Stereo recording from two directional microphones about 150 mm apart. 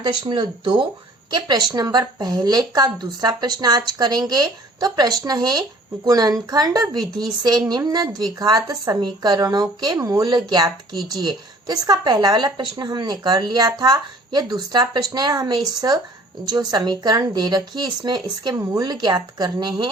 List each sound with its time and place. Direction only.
0.0 s speech: 30° right (ahead or behind)